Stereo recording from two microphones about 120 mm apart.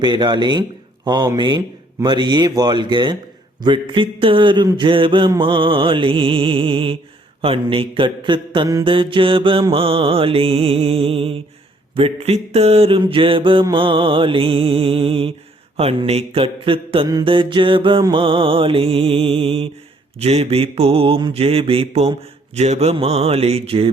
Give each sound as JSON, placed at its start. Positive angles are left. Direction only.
{"t": 0.0, "sound": "speech", "side_deg": -40}
{"t": 3.6, "sound": "mantra", "side_deg": -40}
{"t": 11.9, "sound": "speech", "side_deg": -55}
{"t": 13.0, "sound": "mantra", "side_deg": -45}
{"t": 20.1, "sound": "speech", "side_deg": -60}